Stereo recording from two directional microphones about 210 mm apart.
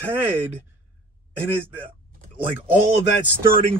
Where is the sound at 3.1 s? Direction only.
60° left (ahead or behind).